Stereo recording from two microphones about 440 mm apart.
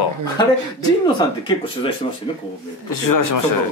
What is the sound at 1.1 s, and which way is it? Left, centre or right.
Speech, centre.